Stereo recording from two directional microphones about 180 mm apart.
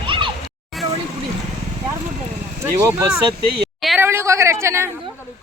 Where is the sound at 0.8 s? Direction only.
Centre (ahead or behind).